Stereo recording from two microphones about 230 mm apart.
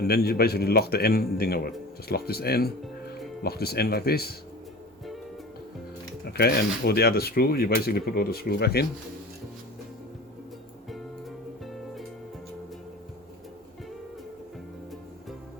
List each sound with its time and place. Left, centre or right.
0.0 s a man's voice: left
6.2 s a man's voice: left
11.6 s music: centre